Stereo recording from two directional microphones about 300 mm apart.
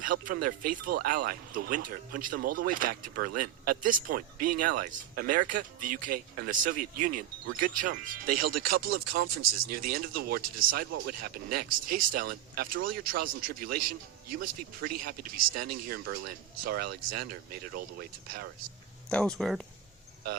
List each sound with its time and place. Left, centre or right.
0.0 s speech: right
19.0 s speech: centre